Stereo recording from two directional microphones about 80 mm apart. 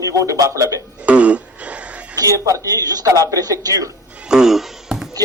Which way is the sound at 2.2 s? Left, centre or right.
Right.